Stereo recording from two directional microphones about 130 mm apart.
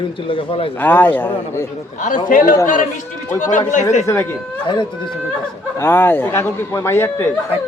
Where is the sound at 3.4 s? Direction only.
75° left (ahead or behind).